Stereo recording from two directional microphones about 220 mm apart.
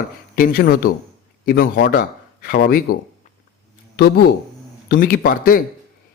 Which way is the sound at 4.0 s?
45° left (ahead or behind).